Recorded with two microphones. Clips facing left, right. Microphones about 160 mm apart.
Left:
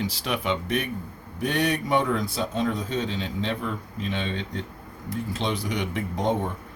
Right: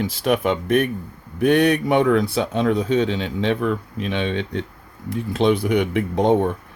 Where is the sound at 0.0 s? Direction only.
50° right (ahead or behind); by 6.3 s 65° right (ahead or behind).